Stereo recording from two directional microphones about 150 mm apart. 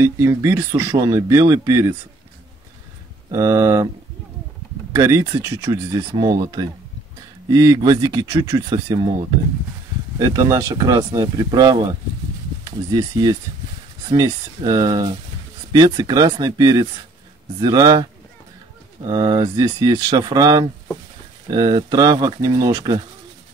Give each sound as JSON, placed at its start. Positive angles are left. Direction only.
{"t": 0.0, "sound": "speech", "side_deg": -15}
{"t": 3.3, "sound": "speech", "side_deg": -20}
{"t": 4.9, "sound": "speech", "side_deg": -20}
{"t": 10.1, "sound": "speech", "side_deg": -20}
{"t": 19.0, "sound": "speech", "side_deg": -25}